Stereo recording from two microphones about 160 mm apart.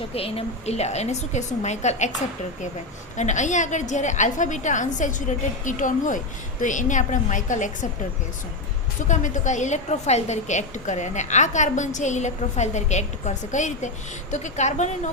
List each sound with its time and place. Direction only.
0.1 s a woman's voice: 35° left (ahead or behind)
3.2 s a woman's voice: 50° left (ahead or behind)
9.0 s a woman's voice: 50° left (ahead or behind)